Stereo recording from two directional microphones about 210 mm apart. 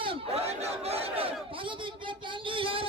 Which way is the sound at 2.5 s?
25° right (ahead or behind).